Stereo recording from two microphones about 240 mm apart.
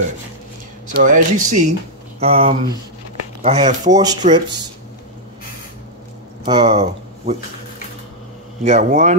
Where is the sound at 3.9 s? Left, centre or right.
Centre.